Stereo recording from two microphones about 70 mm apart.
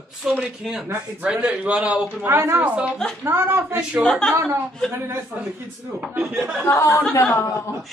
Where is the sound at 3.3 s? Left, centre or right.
Right.